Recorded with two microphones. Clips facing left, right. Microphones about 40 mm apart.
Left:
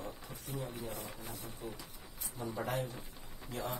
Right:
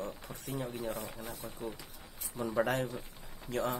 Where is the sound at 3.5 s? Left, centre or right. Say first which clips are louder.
Right 6 dB; right.